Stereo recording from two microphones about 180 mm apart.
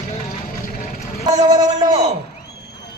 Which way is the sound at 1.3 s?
20° right (ahead or behind).